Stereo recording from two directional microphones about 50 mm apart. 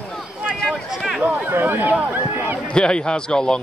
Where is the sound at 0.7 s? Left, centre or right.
Centre.